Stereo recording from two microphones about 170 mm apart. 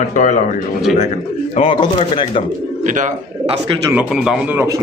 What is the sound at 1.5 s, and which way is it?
Speech, 35° left (ahead or behind).